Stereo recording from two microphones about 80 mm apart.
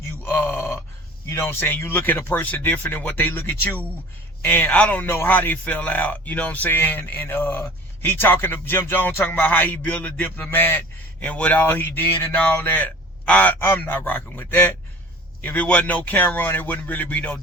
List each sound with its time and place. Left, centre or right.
0.2 s groan: left
1.3 s speech: left